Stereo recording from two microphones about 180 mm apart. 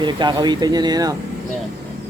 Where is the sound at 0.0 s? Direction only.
25° right (ahead or behind).